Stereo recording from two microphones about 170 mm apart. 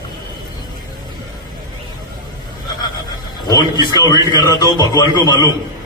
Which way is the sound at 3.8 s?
25° left (ahead or behind).